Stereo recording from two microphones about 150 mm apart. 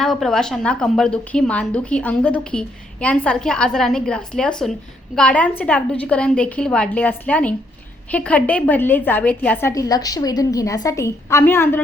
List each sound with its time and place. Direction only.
0.0 s a woman's voice: 5° left (ahead or behind)